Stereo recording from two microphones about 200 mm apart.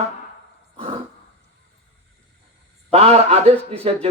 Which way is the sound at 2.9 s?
30° right (ahead or behind).